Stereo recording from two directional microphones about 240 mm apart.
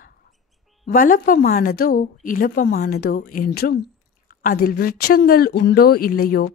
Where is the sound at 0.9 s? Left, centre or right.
Left.